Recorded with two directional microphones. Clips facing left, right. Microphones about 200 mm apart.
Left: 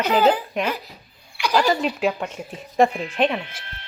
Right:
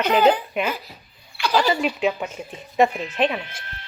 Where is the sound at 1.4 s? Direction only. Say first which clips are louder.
Even; 15° left (ahead or behind).